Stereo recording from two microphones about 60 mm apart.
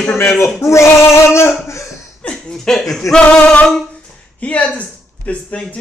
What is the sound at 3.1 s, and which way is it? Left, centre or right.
Male singing, left.